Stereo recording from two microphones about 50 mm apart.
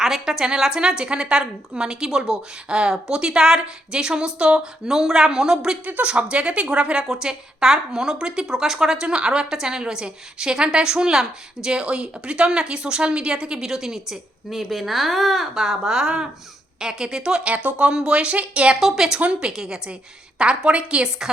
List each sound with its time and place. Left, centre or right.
0.0 s speech: centre
5.8 s speech: right
17.5 s speech: right
18.8 s speech: centre
19.2 s speech: right